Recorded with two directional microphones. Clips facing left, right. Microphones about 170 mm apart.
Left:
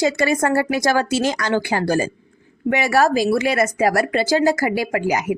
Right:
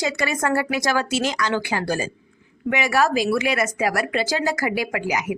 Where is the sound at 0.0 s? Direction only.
30° left (ahead or behind).